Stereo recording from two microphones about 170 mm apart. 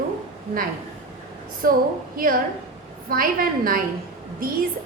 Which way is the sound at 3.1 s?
55° right (ahead or behind).